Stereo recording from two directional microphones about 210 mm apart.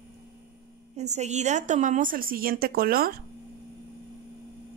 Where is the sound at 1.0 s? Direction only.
30° right (ahead or behind).